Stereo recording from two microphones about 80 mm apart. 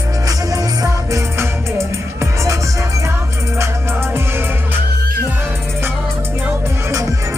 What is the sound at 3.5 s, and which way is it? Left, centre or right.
Music, right.